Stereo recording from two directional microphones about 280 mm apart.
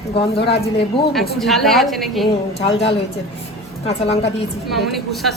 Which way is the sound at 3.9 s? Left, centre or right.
Left.